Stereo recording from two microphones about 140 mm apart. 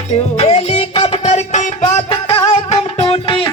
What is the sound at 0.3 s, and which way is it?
Music, 45° left (ahead or behind).